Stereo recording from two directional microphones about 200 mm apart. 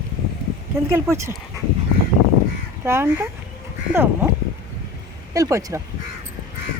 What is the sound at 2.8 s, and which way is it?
Speech, 10° right (ahead or behind).